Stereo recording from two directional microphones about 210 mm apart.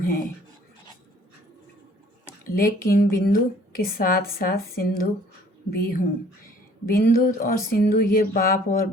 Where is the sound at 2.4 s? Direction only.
45° left (ahead or behind).